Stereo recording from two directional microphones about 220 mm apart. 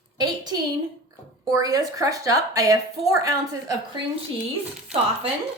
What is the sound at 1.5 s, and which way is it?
Speech, 15° right (ahead or behind).